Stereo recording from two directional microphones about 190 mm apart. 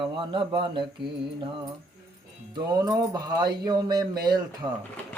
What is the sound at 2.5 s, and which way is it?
Speech, 20° right (ahead or behind).